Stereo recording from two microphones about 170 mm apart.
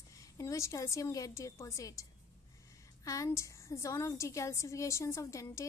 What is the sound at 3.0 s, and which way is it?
A woman's voice, 20° left (ahead or behind).